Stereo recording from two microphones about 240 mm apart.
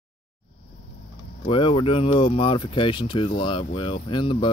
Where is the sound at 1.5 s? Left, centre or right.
Left.